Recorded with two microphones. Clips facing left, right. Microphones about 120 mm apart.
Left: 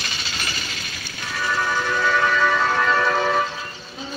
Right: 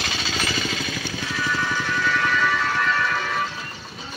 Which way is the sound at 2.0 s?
45° left (ahead or behind).